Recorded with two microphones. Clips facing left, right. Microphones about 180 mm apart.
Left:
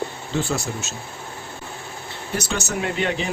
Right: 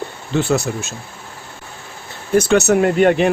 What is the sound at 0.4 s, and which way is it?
Speech, 65° right (ahead or behind).